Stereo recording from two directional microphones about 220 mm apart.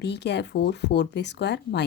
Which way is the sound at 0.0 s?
50° left (ahead or behind).